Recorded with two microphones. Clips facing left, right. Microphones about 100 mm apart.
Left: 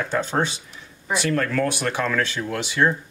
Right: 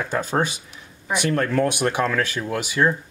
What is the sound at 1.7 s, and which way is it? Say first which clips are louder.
Speech: right 2 dB; 15° right (ahead or behind).